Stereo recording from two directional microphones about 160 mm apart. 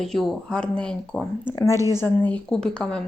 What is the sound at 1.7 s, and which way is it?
Speech, 20° right (ahead or behind).